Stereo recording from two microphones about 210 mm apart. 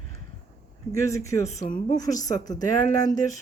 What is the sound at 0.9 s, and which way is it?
Speech, 15° left (ahead or behind).